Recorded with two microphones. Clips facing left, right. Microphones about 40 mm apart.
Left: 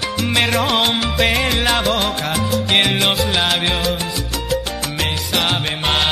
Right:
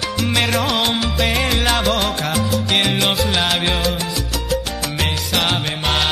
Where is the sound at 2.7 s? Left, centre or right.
Centre.